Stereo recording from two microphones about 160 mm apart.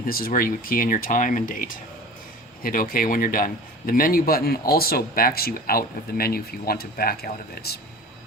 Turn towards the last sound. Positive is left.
turn(degrees=75)  # may be behind; listen again after turning